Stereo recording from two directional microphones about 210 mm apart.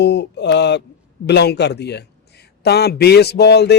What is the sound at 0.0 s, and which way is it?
Mantra, 55° left (ahead or behind).